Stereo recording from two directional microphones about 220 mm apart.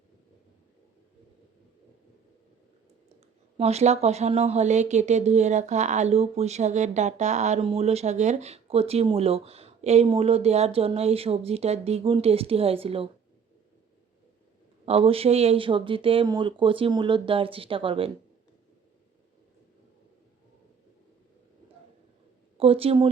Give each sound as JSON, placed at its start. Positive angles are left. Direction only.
{"t": 3.6, "sound": "speech", "side_deg": -30}
{"t": 14.8, "sound": "speech", "side_deg": -25}
{"t": 22.5, "sound": "speech", "side_deg": -25}